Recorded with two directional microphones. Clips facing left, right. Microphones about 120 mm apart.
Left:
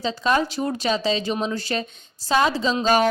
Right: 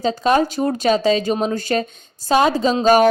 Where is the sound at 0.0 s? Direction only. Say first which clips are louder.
Right 5 dB; 45° right (ahead or behind).